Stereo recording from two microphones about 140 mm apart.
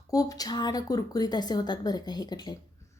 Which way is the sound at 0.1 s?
25° left (ahead or behind).